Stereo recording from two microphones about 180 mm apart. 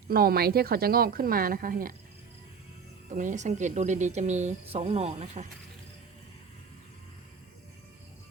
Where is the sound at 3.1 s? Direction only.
45° right (ahead or behind).